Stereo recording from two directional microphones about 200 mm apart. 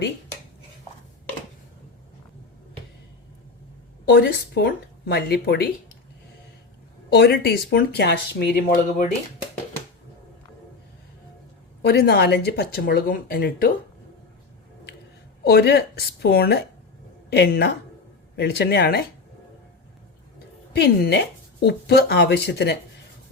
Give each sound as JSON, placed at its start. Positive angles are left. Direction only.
{"t": 4.1, "sound": "speech", "side_deg": 55}
{"t": 7.1, "sound": "speech", "side_deg": 55}
{"t": 8.6, "sound": "speech", "side_deg": 40}
{"t": 11.8, "sound": "speech", "side_deg": 55}
{"t": 15.4, "sound": "speech", "side_deg": 50}
{"t": 20.7, "sound": "speech", "side_deg": 55}